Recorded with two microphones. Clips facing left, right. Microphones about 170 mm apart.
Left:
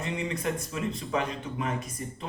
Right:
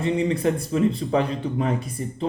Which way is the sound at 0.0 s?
30° right (ahead or behind).